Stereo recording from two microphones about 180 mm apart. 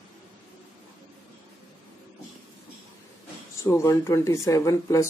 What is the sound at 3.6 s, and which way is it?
Speech, 15° left (ahead or behind).